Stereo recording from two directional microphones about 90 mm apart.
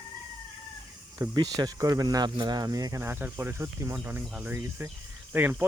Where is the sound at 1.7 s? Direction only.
40° right (ahead or behind).